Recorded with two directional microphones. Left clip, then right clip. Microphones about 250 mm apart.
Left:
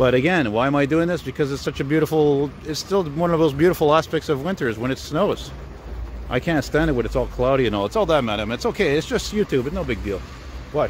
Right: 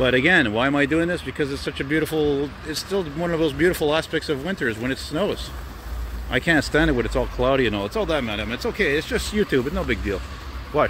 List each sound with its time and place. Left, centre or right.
0.0 s speech: centre